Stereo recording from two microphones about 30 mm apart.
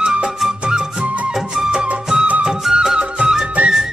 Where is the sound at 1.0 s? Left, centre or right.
Right.